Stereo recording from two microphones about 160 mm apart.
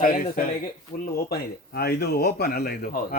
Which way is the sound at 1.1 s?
80° left.